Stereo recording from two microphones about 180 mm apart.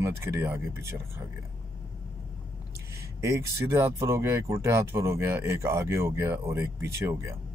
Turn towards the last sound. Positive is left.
turn(degrees=-15)  # may be behind; listen again after turning